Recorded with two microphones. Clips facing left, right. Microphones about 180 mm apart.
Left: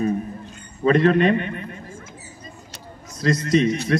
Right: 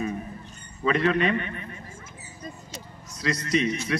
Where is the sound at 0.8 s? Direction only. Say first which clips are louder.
Left 7 dB; 45° left (ahead or behind).